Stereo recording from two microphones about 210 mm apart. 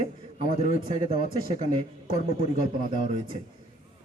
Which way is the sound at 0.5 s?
35° left (ahead or behind).